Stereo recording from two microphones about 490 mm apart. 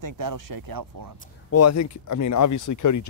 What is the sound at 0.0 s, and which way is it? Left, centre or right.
Speech, right.